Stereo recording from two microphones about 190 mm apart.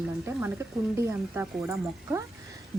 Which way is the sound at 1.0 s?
15° right (ahead or behind).